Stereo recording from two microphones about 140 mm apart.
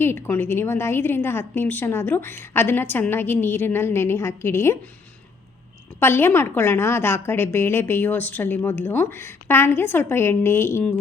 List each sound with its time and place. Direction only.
0.0 s a woman's voice: 15° left (ahead or behind)
6.0 s a woman's voice: 15° left (ahead or behind)